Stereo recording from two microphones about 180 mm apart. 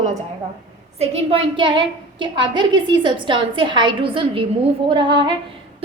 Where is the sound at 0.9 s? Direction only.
30° right (ahead or behind).